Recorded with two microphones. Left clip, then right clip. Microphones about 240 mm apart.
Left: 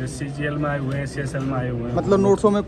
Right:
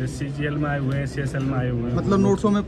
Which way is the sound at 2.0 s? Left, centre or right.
Centre.